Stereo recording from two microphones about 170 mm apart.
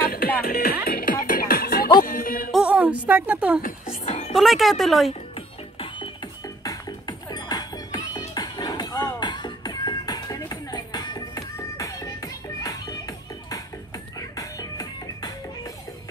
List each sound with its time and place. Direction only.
0.0 s music: 60° left (ahead or behind)
2.5 s a sound: 5° right (ahead or behind)
3.6 s music: 45° left (ahead or behind)
4.3 s speech: centre (ahead or behind)
6.6 s music: 25° left (ahead or behind)